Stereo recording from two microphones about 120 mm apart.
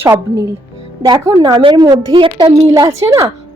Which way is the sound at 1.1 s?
35° right (ahead or behind).